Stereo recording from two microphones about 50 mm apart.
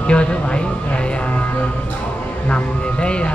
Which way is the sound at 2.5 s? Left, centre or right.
Left.